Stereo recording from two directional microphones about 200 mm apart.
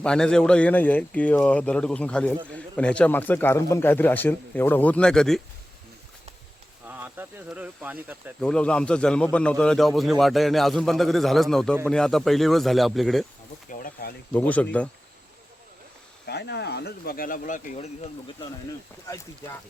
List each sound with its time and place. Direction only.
0.0 s speech: 5° left (ahead or behind)
6.8 s speech: 10° right (ahead or behind)
8.4 s a man's voice: 5° left (ahead or behind)
13.7 s a sound: 45° left (ahead or behind)
14.3 s speech: 5° left (ahead or behind)
16.2 s speech: 55° left (ahead or behind); by 18.1 s 35° left (ahead or behind)